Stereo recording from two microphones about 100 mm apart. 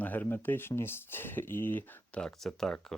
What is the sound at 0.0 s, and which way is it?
Speech, 15° left (ahead or behind).